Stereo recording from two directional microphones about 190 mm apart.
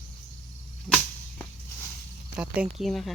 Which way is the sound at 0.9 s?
5° left (ahead or behind).